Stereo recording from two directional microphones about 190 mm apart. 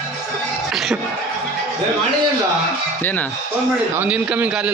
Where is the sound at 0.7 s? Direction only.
5° right (ahead or behind).